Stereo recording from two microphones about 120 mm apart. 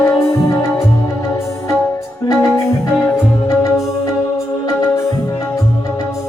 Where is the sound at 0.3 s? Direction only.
25° left (ahead or behind).